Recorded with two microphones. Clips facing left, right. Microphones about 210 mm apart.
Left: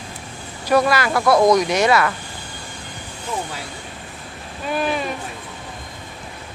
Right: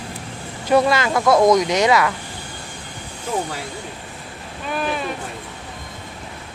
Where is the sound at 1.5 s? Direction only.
20° right (ahead or behind).